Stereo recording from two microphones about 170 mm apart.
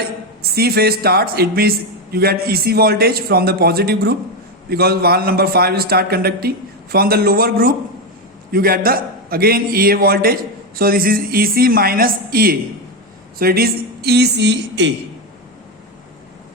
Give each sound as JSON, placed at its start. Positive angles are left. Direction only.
{"t": 0.5, "sound": "a man's voice", "side_deg": -65}